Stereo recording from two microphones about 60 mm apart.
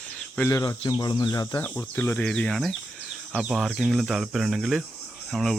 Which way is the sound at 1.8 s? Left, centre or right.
Left.